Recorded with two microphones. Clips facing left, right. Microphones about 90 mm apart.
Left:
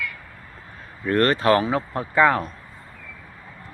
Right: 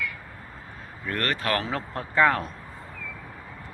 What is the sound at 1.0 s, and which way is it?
Speech, 35° left (ahead or behind).